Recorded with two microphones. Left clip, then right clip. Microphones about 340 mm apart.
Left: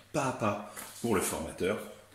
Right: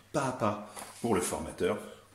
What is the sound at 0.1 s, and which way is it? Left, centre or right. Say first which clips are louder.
Speech: even; right.